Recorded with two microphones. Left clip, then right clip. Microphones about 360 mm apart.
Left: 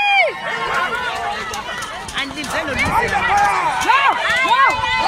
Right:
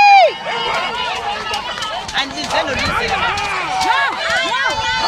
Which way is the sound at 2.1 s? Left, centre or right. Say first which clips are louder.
Right 4 dB; right.